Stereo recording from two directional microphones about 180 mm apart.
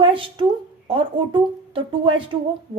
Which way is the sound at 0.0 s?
30° right (ahead or behind).